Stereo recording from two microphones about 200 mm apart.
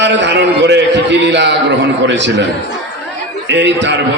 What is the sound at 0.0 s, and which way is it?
A man's voice, 60° right (ahead or behind).